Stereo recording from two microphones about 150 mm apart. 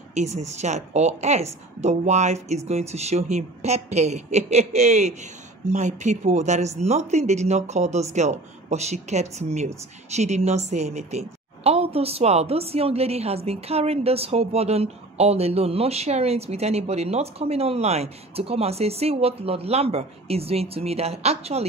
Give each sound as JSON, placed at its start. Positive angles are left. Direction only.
{"t": 0.1, "sound": "speech", "side_deg": -50}